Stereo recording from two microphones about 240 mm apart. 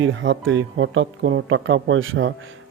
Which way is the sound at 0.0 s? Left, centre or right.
Right.